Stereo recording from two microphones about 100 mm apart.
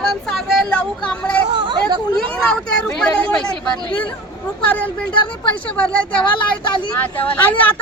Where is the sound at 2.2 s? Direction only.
5° left (ahead or behind).